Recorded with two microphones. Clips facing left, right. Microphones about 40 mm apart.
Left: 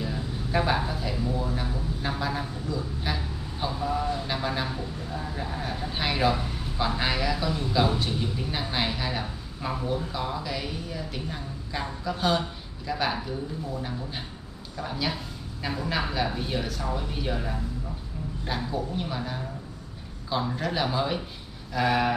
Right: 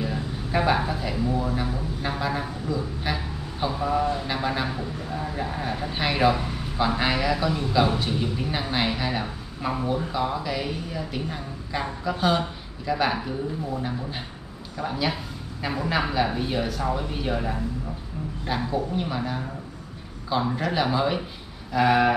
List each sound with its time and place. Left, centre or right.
0.0 s speech: centre
18.4 s speech: centre